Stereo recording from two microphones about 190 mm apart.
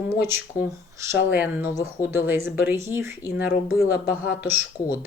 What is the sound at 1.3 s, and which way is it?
Speech, 10° right (ahead or behind).